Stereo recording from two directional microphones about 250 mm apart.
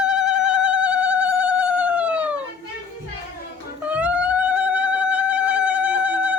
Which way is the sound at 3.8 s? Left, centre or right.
Centre.